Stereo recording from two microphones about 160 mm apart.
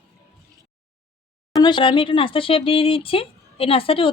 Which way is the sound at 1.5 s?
30° left (ahead or behind).